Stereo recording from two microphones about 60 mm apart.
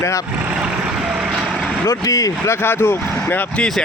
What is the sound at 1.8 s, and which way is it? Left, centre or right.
Speech, left.